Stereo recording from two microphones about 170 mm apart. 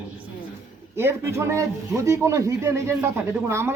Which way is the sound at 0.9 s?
15° right (ahead or behind).